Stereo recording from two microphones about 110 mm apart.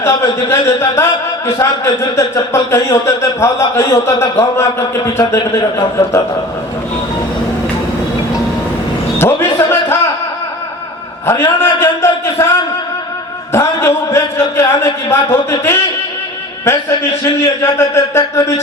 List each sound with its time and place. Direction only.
0.0 s a man's voice: 25° left (ahead or behind)
9.1 s a sound: 20° left (ahead or behind)
11.3 s a man's voice: 25° left (ahead or behind)
13.5 s a man's voice: 25° left (ahead or behind)